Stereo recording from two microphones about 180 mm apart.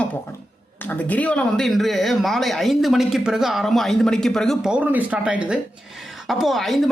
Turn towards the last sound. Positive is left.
turn(degrees=0)  # may be behind; listen again after turning